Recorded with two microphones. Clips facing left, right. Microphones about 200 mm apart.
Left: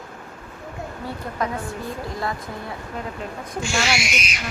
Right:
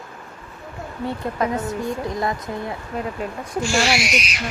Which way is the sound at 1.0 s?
20° right (ahead or behind).